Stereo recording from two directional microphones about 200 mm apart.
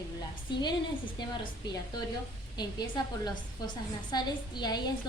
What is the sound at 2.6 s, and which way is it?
A woman's voice, 20° left (ahead or behind).